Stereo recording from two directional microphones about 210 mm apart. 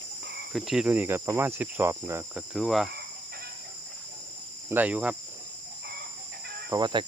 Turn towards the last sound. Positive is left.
turn(degrees=-20)  # may be behind; listen again after turning